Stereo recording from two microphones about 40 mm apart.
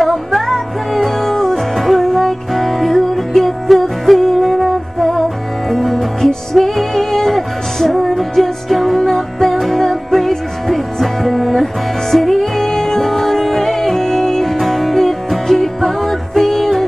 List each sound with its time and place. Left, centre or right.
0.0 s music: centre